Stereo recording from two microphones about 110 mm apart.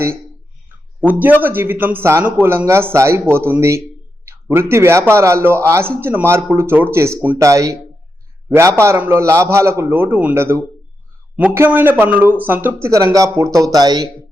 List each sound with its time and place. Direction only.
1.0 s speech: 15° right (ahead or behind)
12.9 s speech: 30° right (ahead or behind)